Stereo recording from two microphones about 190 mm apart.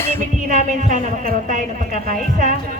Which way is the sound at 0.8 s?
40° right (ahead or behind).